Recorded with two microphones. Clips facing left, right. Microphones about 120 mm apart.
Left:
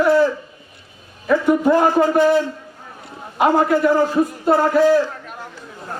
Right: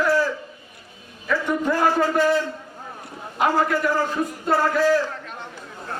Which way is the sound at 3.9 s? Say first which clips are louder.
Left 7 dB; 25° left (ahead or behind).